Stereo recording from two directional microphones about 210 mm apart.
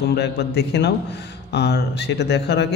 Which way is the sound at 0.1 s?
50° left (ahead or behind).